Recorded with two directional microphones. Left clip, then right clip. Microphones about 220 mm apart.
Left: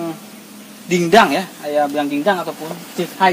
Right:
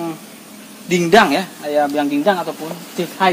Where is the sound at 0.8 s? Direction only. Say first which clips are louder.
Even; 5° left (ahead or behind).